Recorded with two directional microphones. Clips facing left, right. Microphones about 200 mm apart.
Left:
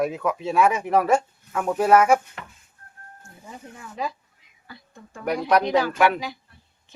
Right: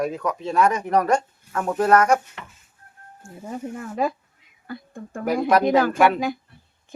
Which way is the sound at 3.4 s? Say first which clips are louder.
Right 10 dB; 50° right (ahead or behind).